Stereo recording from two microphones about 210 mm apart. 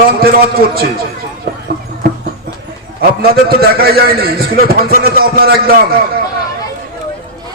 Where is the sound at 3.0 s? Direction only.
45° right (ahead or behind).